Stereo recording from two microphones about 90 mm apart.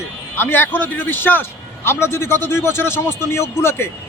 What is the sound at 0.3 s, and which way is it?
A man's voice, 25° left (ahead or behind).